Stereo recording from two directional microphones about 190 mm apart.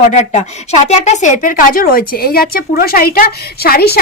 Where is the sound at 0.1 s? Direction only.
35° left (ahead or behind).